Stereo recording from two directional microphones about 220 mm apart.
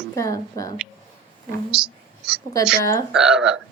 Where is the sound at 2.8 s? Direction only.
15° left (ahead or behind).